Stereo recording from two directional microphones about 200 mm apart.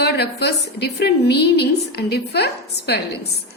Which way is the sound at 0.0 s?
55° left (ahead or behind).